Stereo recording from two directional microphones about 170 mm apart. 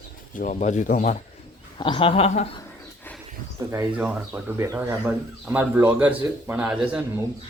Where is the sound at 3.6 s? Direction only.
10° right (ahead or behind).